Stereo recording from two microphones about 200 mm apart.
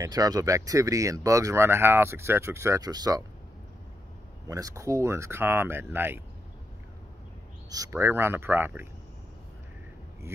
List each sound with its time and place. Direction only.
0.0 s speech: 20° right (ahead or behind)
4.5 s speech: 15° right (ahead or behind)
7.7 s speech: 15° right (ahead or behind)